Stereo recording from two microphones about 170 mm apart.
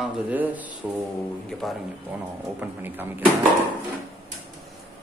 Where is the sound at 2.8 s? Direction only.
10° right (ahead or behind).